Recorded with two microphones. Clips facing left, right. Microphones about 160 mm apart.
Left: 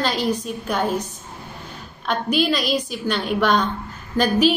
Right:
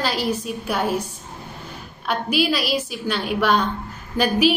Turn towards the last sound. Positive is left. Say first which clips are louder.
# left 1 dB
turn(degrees=-10)  # may be behind; listen again after turning